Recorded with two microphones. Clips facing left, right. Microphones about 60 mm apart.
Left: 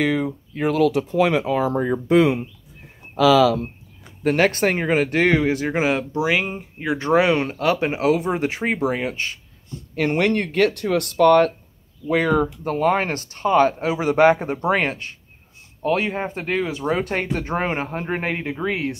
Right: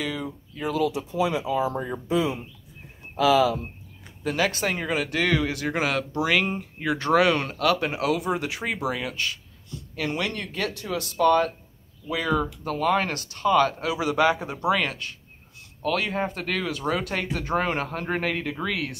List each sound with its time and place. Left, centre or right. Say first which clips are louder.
0.0 s speech: left 9 dB; left
4.2 s speech: left 7 dB; left
9.9 s speech: left 9 dB; left
12.1 s speech: left 6 dB; left
12.6 s speech: left 1 dB; left